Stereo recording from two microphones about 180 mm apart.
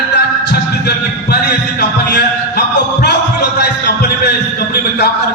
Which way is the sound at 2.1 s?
65° left (ahead or behind).